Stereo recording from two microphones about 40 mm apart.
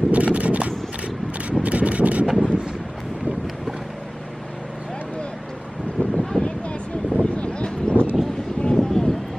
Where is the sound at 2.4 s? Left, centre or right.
Right.